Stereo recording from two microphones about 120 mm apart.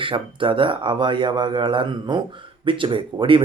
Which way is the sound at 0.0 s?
45° right (ahead or behind).